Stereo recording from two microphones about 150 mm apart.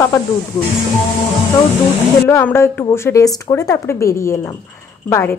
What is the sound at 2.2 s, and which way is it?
A woman's voice, 15° left (ahead or behind).